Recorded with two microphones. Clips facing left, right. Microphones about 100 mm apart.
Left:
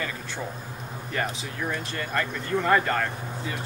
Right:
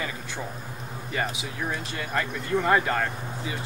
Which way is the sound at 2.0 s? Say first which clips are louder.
Even; 10° right (ahead or behind).